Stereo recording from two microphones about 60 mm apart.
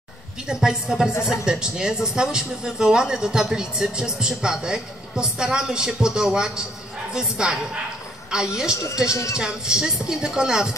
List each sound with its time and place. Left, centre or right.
0.5 s speech: centre
1.1 s speech: left
1.4 s speech: centre
9.1 s speech: left
9.4 s speech: centre